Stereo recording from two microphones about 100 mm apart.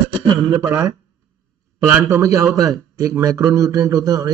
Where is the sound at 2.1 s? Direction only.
35° right (ahead or behind).